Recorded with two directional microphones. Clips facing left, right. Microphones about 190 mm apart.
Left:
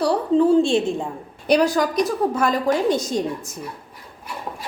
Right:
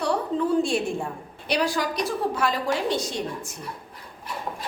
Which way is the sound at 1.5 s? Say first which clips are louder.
Left 7 dB; 45° left (ahead or behind).